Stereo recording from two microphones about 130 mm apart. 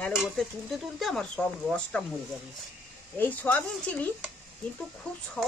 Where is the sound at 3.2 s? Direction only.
10° left (ahead or behind).